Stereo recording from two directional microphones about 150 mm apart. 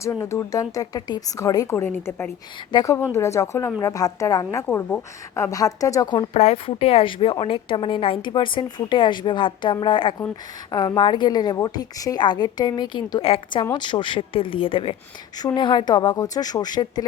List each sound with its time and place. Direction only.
0.0 s a woman's voice: 20° left (ahead or behind)
6.3 s a woman's voice: 45° left (ahead or behind); by 17.1 s 25° left (ahead or behind)